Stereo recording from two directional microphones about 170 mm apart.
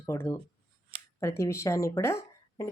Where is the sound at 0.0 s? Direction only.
15° left (ahead or behind).